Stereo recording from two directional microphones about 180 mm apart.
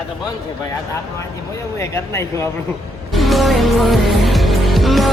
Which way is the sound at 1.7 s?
15° left (ahead or behind).